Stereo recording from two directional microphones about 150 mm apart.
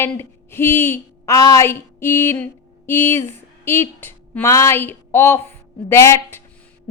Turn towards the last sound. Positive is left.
turn(degrees=15)  # may be behind; listen again after turning